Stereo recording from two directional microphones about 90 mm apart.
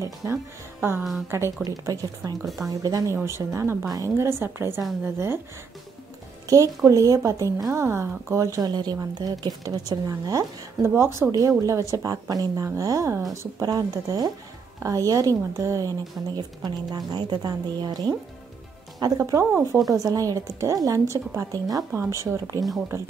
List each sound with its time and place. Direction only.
0.0 s speech: 40° right (ahead or behind)
1.6 s a woman's voice: 45° right (ahead or behind)
2.4 s speech: centre (ahead or behind)
2.8 s a woman's voice: 45° right (ahead or behind); by 5.4 s 25° right (ahead or behind)
6.4 s a woman's voice: 40° right (ahead or behind)
11.0 s a woman's voice: 30° right (ahead or behind)
16.6 s a woman's voice: 50° right (ahead or behind)
19.7 s speech: centre (ahead or behind)
20.0 s speech: 40° right (ahead or behind)